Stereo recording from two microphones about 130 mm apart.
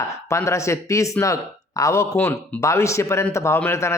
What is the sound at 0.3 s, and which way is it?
A man's voice, 25° left (ahead or behind).